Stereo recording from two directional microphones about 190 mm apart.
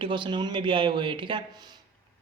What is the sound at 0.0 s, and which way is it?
Speech, 25° right (ahead or behind).